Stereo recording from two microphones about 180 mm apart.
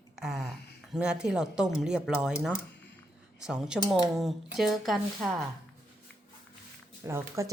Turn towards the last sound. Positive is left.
turn(degrees=-15)  # may be behind; listen again after turning